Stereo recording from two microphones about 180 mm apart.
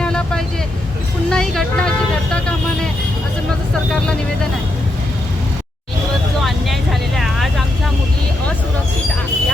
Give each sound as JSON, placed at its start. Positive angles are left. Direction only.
{"t": 0.0, "sound": "vehicle", "side_deg": 5}
{"t": 6.4, "sound": "vehicle", "side_deg": 0}